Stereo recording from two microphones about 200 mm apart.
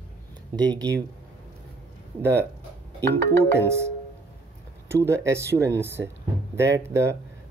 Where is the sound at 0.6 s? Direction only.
20° right (ahead or behind).